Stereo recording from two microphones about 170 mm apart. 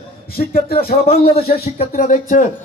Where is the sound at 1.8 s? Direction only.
45° left (ahead or behind).